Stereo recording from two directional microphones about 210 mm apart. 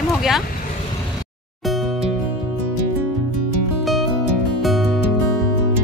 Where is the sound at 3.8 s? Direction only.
Centre (ahead or behind).